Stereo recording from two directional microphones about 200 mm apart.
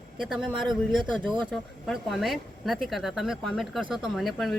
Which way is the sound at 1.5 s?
Centre (ahead or behind).